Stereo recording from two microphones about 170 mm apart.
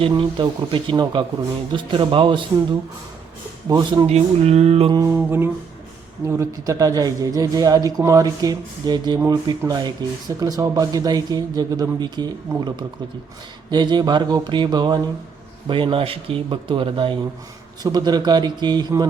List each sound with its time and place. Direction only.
0.1 s speech: 25° right (ahead or behind)
3.7 s speech: 25° right (ahead or behind)
4.1 s speech: 40° right (ahead or behind)
4.9 s music: 15° right (ahead or behind)
6.2 s speech: 15° right (ahead or behind)